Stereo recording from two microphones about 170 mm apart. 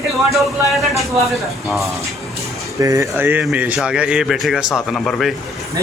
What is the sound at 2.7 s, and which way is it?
A man's voice, 20° right (ahead or behind).